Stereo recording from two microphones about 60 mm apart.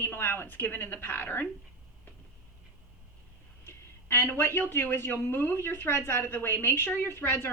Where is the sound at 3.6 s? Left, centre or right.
Left.